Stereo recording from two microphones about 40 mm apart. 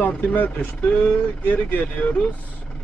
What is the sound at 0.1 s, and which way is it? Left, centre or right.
Speech, left.